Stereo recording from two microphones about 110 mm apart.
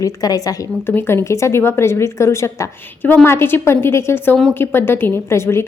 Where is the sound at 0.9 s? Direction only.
20° left (ahead or behind).